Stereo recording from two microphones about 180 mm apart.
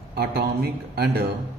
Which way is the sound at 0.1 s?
60° right (ahead or behind).